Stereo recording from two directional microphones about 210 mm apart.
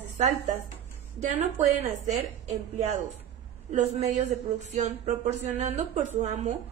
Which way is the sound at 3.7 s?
30° right (ahead or behind).